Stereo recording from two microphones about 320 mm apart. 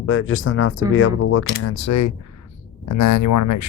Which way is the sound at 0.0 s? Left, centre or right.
Left.